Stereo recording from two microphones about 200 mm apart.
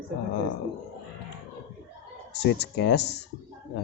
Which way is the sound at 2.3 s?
60° left (ahead or behind).